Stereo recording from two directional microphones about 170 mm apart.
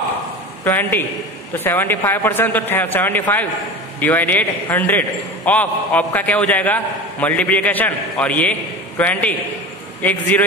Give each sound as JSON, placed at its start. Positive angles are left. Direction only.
{"t": 0.7, "sound": "a man's voice", "side_deg": 10}